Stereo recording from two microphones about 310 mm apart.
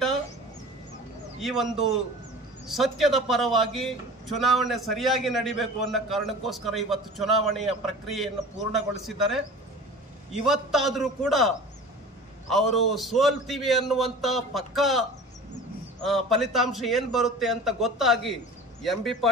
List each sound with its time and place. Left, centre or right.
1.4 s a man's voice: centre
2.7 s a man's voice: centre
10.4 s a man's voice: centre